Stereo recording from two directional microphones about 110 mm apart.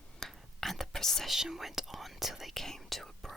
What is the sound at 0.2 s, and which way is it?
Whispering, centre (ahead or behind).